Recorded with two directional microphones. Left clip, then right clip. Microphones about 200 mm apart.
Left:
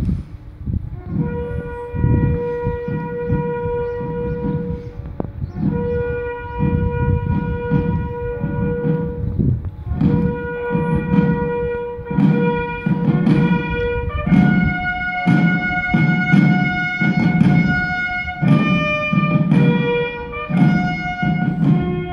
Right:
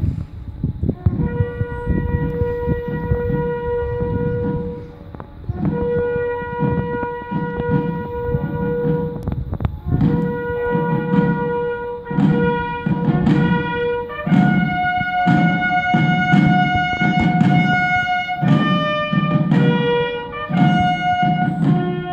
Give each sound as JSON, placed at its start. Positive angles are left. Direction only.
{"t": 7.3, "sound": "civil defense siren", "side_deg": 30}
{"t": 9.9, "sound": "music", "side_deg": 30}
{"t": 10.7, "sound": "a sound", "side_deg": 30}
{"t": 12.2, "sound": "music", "side_deg": 30}